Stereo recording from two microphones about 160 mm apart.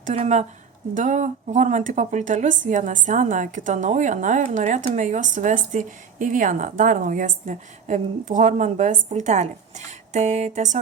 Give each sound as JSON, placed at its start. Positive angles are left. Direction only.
{"t": 0.0, "sound": "speech", "side_deg": -50}